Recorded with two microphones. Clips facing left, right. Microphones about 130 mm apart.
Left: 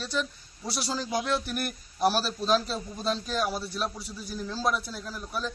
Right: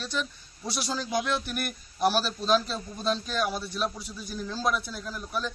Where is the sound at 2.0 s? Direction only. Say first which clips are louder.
Even; centre (ahead or behind).